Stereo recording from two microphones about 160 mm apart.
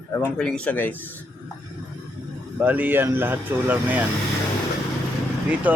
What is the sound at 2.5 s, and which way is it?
Speech, 10° right (ahead or behind).